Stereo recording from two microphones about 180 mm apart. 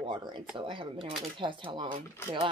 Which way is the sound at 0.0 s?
25° right (ahead or behind).